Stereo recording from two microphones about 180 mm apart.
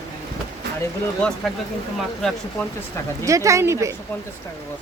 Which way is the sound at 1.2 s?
5° left (ahead or behind).